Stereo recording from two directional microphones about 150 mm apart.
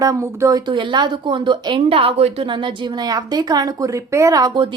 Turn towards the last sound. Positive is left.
turn(degrees=-25)  # may be behind; listen again after turning